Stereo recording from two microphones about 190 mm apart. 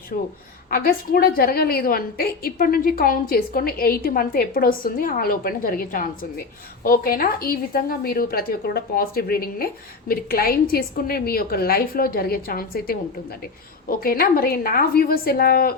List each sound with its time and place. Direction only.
0.7 s a woman's voice: 50° left (ahead or behind)